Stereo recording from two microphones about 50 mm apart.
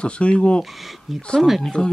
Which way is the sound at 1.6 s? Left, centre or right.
Centre.